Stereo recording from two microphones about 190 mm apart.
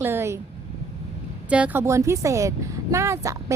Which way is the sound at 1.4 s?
5° right (ahead or behind).